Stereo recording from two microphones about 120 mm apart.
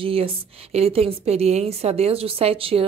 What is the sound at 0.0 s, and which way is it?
A woman's voice, 50° right (ahead or behind).